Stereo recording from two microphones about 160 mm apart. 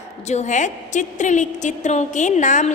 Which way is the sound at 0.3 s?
45° left (ahead or behind).